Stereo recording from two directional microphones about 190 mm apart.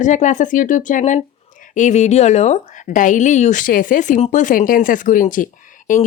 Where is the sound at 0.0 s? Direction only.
40° left (ahead or behind).